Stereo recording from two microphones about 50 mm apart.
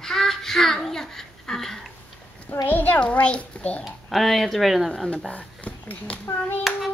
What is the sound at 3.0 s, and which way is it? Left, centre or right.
Speech, left.